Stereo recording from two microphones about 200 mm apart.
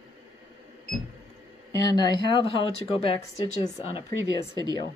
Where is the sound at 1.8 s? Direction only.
55° right (ahead or behind).